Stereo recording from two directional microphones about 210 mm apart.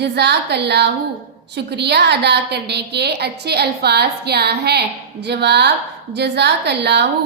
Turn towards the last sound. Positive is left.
turn(degrees=-55)  # may be behind; listen again after turning